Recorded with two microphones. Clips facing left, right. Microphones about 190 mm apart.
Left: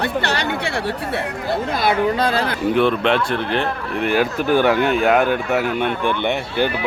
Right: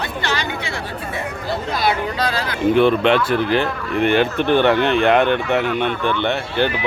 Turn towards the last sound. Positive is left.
turn(degrees=10)  # may be behind; listen again after turning